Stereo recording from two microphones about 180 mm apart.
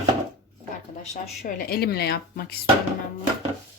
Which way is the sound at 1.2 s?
50° left (ahead or behind).